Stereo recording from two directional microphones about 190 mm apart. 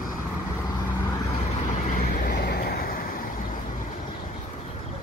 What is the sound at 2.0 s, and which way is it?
Vehicle, 50° left (ahead or behind).